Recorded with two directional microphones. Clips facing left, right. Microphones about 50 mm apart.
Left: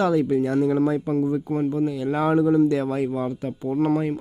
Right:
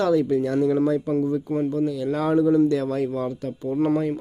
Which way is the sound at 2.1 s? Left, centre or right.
Centre.